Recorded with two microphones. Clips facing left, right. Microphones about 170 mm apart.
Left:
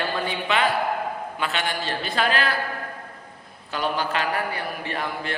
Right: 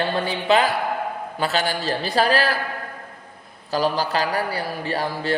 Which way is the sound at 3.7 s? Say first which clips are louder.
Right 4 dB; 35° right (ahead or behind).